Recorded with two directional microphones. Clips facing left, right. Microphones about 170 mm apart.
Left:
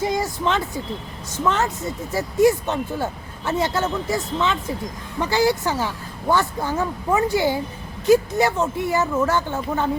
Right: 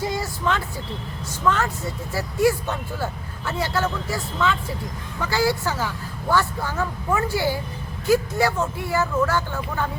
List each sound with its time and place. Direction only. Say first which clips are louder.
0.0 s speech: left 3 dB; 20° left (ahead or behind)